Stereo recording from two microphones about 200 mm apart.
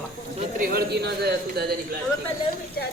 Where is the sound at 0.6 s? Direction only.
50° right (ahead or behind).